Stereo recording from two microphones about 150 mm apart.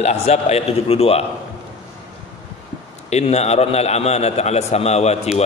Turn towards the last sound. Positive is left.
turn(degrees=45)  # may be behind; listen again after turning